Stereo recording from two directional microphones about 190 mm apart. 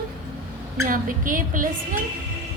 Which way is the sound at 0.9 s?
45° right (ahead or behind).